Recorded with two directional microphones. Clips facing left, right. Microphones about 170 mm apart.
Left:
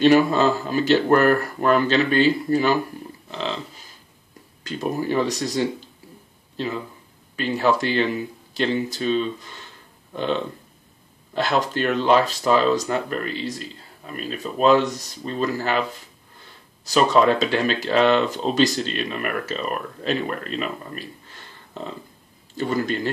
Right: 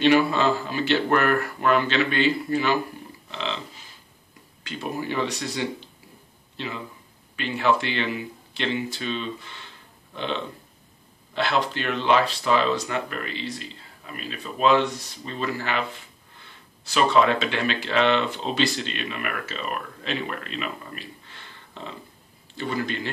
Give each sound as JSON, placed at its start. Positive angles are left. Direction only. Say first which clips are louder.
{"t": 0.0, "sound": "speech", "louder": "left 3 dB", "side_deg": 40}
{"t": 3.3, "sound": "a sound", "louder": "left 3 dB", "side_deg": 40}
{"t": 4.6, "sound": "speech", "louder": "left 5 dB", "side_deg": 40}
{"t": 11.3, "sound": "speech", "louder": "left 3 dB", "side_deg": 45}
{"t": 16.8, "sound": "speech", "louder": "left 3 dB", "side_deg": 40}